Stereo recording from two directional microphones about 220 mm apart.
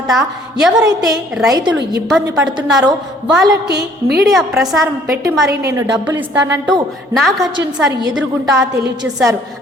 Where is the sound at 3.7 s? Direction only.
50° right (ahead or behind).